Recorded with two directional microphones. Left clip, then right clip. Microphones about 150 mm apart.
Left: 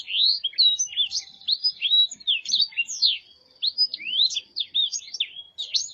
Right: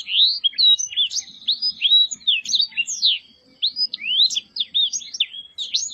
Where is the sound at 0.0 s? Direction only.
5° left (ahead or behind).